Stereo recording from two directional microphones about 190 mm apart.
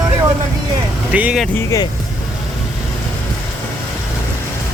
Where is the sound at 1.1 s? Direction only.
5° right (ahead or behind).